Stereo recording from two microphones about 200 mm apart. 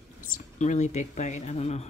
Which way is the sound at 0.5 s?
35° left (ahead or behind).